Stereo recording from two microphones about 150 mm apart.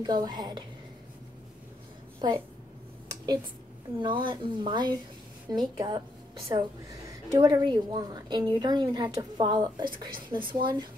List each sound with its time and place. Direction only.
0.0 s a woman's voice: 25° right (ahead or behind)
2.1 s a woman's voice: 30° right (ahead or behind)
4.0 s a woman's voice: 35° right (ahead or behind)